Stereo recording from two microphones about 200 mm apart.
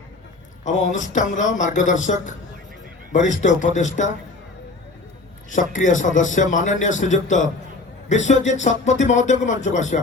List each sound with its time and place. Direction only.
0.6 s a man's voice: 40° left (ahead or behind)
5.7 s a man's voice: 40° left (ahead or behind)